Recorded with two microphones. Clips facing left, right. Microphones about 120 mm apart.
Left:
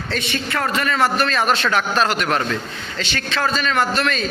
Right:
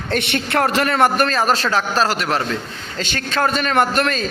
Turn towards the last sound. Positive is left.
turn(degrees=-40)  # may be behind; listen again after turning